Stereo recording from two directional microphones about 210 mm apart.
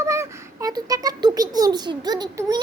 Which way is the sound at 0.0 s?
15° right (ahead or behind).